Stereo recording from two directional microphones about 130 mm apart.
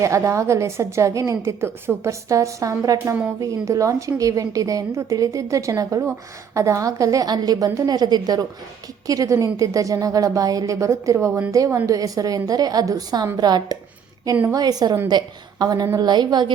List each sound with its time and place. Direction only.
0.0 s a woman's voice: 25° right (ahead or behind)